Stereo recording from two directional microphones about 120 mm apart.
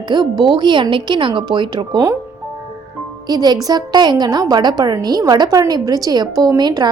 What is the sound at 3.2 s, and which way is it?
A woman's voice, 35° right (ahead or behind).